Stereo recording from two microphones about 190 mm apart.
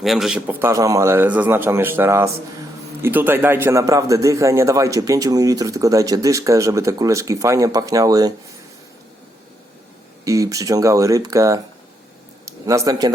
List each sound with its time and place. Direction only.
0.0 s a man's voice: centre (ahead or behind); by 8.3 s 20° right (ahead or behind)
10.2 s a man's voice: 15° right (ahead or behind)